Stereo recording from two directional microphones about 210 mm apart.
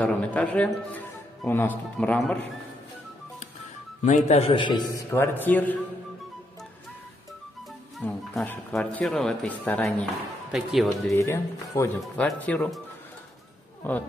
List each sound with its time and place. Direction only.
0.0 s speech: 5° left (ahead or behind)
4.0 s a man's voice: 35° left (ahead or behind)
5.1 s speech: 10° left (ahead or behind)
8.0 s speech: 5° left (ahead or behind)
11.1 s speech: 15° left (ahead or behind)
13.8 s speech: 10° left (ahead or behind)